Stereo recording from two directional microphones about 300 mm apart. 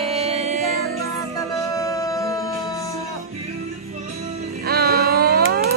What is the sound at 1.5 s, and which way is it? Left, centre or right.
Music, centre.